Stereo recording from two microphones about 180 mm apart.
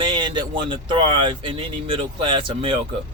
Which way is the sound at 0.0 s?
25° right (ahead or behind).